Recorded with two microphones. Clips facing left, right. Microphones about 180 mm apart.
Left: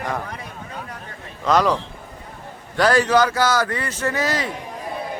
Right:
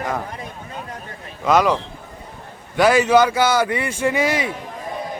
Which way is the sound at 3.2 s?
20° right (ahead or behind).